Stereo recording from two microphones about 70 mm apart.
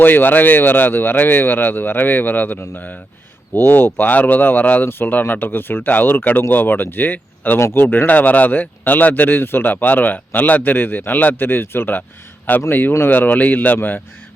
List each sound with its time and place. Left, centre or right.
0.0 s speech: left